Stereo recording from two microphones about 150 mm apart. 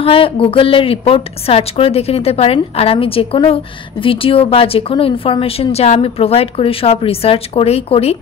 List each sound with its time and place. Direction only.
0.0 s a woman's voice: 40° left (ahead or behind)